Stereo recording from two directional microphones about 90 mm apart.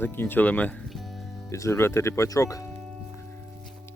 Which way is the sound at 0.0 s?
25° left (ahead or behind).